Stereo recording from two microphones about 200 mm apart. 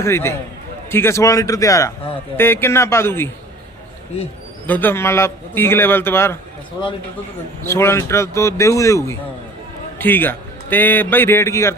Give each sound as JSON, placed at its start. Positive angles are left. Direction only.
{"t": 0.0, "sound": "a man's voice", "side_deg": 15}
{"t": 4.6, "sound": "a man's voice", "side_deg": 10}